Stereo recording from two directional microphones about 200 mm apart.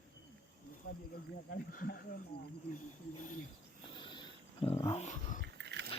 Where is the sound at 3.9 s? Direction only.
25° left (ahead or behind); by 5.4 s 40° left (ahead or behind).